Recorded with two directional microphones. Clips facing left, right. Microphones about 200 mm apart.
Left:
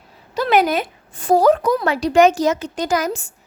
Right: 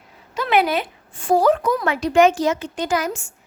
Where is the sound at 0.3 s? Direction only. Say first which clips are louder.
Left 2 dB; 40° left (ahead or behind).